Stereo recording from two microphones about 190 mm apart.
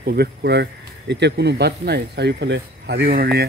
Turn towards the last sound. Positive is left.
turn(degrees=-55)  # may be behind; listen again after turning